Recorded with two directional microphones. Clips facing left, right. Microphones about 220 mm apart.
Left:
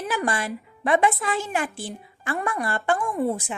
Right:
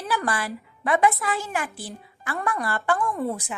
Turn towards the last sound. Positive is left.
turn(degrees=15)  # may be behind; listen again after turning